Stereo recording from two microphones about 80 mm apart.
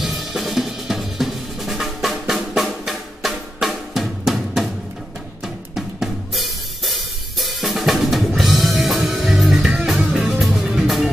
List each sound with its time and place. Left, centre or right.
0.0 s drum kit: centre
5.8 s drum kit: centre